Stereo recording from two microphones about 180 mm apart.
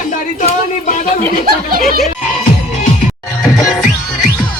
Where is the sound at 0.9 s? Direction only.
45° left (ahead or behind).